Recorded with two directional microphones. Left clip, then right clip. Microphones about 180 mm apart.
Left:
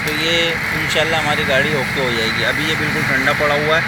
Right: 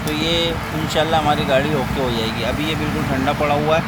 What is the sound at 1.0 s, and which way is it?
Speech, 20° right (ahead or behind).